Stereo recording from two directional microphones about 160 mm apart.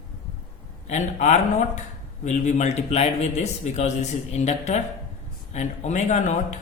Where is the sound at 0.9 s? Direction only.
50° left (ahead or behind).